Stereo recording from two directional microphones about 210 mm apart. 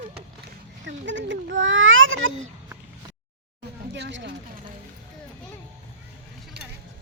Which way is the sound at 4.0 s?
55° right (ahead or behind).